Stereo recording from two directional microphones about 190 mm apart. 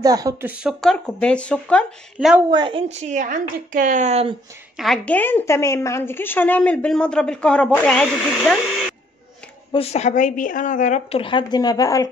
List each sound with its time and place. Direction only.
0.0 s speech: 20° right (ahead or behind); by 1.9 s 5° left (ahead or behind)
2.1 s a woman's voice: 5° right (ahead or behind)
2.5 s a woman's voice: 25° right (ahead or behind)
4.7 s a woman's voice: centre (ahead or behind)
9.7 s a woman's voice: 35° left (ahead or behind)